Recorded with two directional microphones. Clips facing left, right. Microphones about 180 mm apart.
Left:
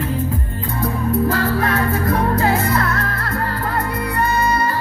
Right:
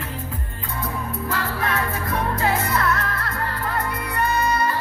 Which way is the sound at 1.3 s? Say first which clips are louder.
Left 7 dB; 40° left (ahead or behind).